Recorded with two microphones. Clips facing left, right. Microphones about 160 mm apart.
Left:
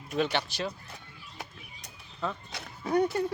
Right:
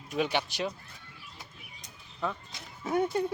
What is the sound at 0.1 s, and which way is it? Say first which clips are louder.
Speech: left 1 dB; 10° right (ahead or behind).